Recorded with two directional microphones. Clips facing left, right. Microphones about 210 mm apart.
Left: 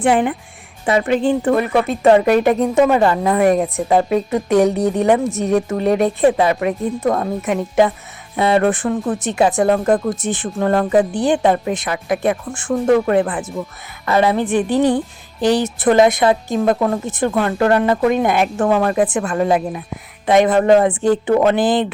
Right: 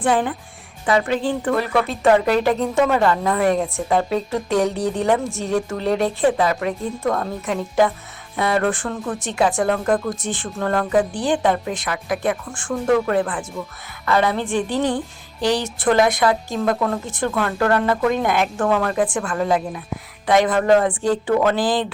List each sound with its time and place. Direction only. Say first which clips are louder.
0.0 s speech: left 4 dB; 20° left (ahead or behind)